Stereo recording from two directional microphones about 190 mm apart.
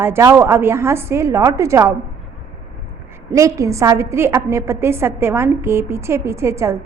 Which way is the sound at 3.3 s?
15° right (ahead or behind).